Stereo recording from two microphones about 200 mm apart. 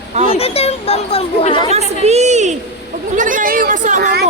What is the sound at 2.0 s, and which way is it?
A woman's voice, 35° right (ahead or behind).